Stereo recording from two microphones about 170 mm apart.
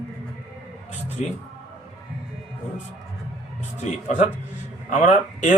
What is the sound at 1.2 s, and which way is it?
Speech, 45° left (ahead or behind).